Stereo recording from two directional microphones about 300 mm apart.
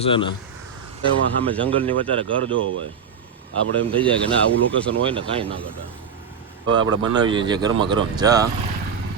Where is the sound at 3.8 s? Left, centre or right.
Centre.